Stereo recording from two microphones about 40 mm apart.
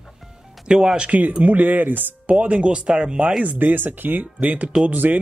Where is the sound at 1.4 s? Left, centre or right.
Right.